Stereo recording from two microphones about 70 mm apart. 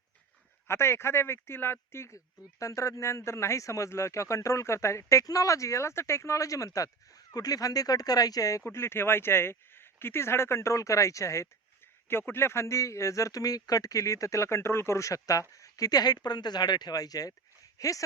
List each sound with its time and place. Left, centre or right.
0.7 s speech: left
12.0 s speech: left